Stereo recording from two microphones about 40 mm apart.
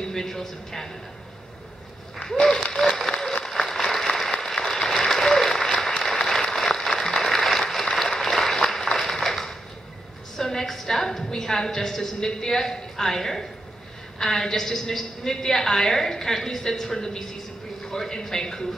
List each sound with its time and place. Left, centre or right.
0.0 s speech: centre
2.1 s speech: centre
2.5 s applause: centre
8.9 s a sound: centre
10.3 s a woman's voice: centre